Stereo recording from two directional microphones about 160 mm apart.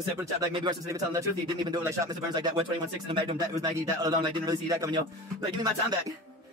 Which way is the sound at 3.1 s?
25° right (ahead or behind).